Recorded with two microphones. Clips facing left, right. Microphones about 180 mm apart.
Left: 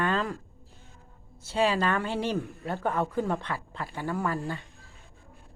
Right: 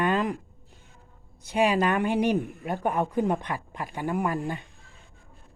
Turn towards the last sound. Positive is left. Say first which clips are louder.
# right 3 dB
turn(degrees=-15)  # may be behind; listen again after turning